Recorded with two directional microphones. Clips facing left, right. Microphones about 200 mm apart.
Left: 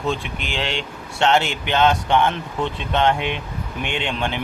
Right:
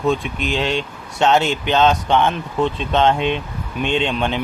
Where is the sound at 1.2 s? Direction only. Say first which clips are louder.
Right 3 dB; 20° right (ahead or behind).